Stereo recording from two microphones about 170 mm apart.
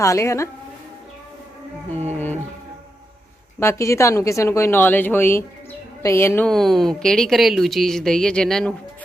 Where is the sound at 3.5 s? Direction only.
15° left (ahead or behind).